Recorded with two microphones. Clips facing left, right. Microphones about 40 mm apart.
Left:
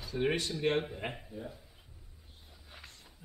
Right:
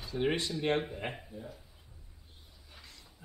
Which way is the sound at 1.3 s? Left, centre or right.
Centre.